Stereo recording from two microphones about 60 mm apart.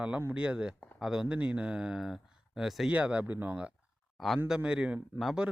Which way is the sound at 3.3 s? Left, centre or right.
Right.